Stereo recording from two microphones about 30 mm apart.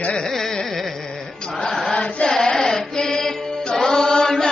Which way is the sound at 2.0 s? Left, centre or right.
Left.